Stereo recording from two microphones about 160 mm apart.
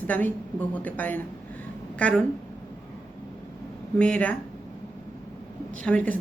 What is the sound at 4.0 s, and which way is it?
Speech, 10° left (ahead or behind).